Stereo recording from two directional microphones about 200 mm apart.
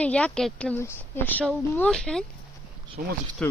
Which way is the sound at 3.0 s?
45° right (ahead or behind).